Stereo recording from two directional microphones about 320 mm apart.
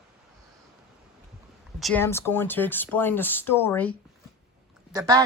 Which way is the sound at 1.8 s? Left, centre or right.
Centre.